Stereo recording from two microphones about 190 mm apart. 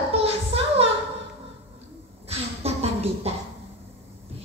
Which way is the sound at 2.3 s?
35° right (ahead or behind).